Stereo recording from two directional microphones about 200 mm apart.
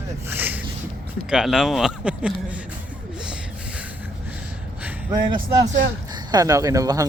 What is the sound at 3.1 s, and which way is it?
Snort, 5° right (ahead or behind).